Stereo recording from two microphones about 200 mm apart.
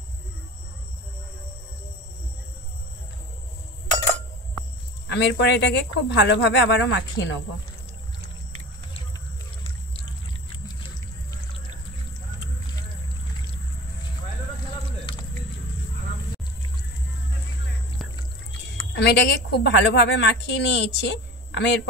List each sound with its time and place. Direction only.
5.0 s a woman's voice: 65° left (ahead or behind)
18.9 s a woman's voice: 60° left (ahead or behind)